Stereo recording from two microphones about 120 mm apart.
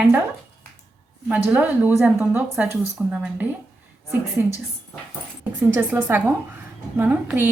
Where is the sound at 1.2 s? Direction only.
10° right (ahead or behind).